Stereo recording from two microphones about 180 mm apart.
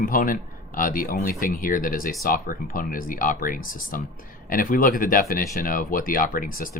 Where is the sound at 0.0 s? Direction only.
50° left (ahead or behind).